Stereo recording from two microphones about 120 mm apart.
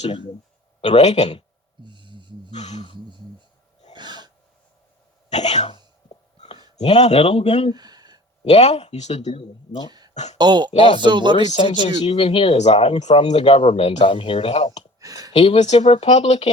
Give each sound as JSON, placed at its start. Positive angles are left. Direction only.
{"t": 0.8, "sound": "speech", "side_deg": 70}
{"t": 1.8, "sound": "music", "side_deg": -40}
{"t": 2.5, "sound": "a sound", "side_deg": 70}
{"t": 3.9, "sound": "a sound", "side_deg": -40}
{"t": 5.3, "sound": "speech", "side_deg": 70}
{"t": 6.7, "sound": "speech", "side_deg": 70}
{"t": 7.7, "sound": "a sound", "side_deg": -35}
{"t": 8.4, "sound": "speech", "side_deg": 65}
{"t": 10.3, "sound": "speech", "side_deg": -40}
{"t": 11.3, "sound": "speech", "side_deg": 60}
{"t": 12.5, "sound": "speech", "side_deg": 65}
{"t": 13.4, "sound": "speech", "side_deg": 55}
{"t": 15.0, "sound": "a sound", "side_deg": -30}
{"t": 15.3, "sound": "speech", "side_deg": 60}